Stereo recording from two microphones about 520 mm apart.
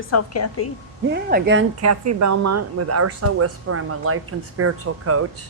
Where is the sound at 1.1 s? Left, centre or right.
Centre.